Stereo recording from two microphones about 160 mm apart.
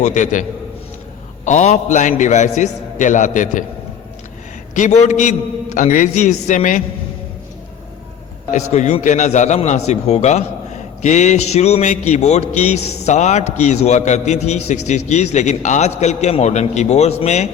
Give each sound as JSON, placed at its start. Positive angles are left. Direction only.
{"t": 0.0, "sound": "a man's voice", "side_deg": 50}
{"t": 1.5, "sound": "a man's voice", "side_deg": 45}
{"t": 4.7, "sound": "a man's voice", "side_deg": 50}
{"t": 8.5, "sound": "a man's voice", "side_deg": 45}